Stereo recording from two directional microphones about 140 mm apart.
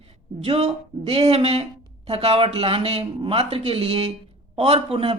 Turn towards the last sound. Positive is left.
turn(degrees=-40)  # may be behind; listen again after turning